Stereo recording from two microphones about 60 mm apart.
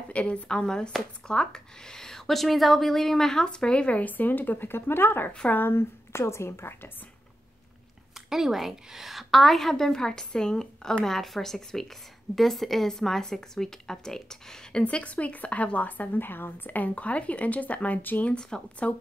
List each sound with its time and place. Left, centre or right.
0.1 s a woman's voice: centre; by 6.9 s left
8.3 s a woman's voice: centre; by 18.3 s left
18.3 s speech: centre